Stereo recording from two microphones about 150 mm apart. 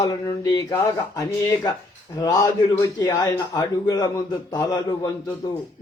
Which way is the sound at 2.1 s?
25° left (ahead or behind).